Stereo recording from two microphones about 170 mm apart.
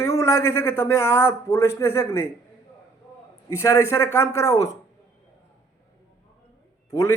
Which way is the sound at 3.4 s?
15° left (ahead or behind).